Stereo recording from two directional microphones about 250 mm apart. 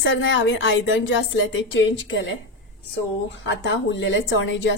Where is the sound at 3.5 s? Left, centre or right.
Left.